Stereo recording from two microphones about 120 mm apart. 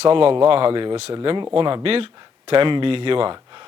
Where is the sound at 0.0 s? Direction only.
50° right (ahead or behind).